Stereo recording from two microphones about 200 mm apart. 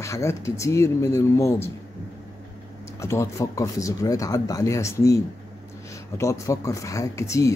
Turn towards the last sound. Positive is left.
turn(degrees=15)  # may be behind; listen again after turning